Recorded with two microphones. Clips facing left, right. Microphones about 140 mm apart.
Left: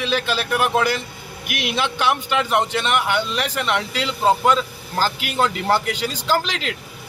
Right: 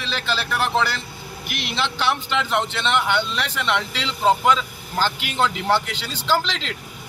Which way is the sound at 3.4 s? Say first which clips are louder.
Left 3 dB; 50° left (ahead or behind).